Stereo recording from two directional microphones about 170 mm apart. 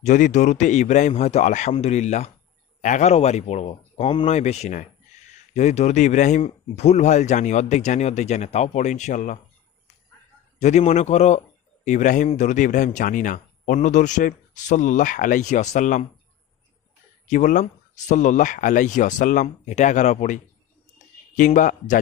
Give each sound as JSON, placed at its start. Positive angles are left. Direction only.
{"t": 0.0, "sound": "speech", "side_deg": 45}
{"t": 10.6, "sound": "speech", "side_deg": 45}
{"t": 17.2, "sound": "speech", "side_deg": 50}